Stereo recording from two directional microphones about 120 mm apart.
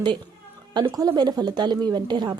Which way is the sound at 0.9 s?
30° right (ahead or behind).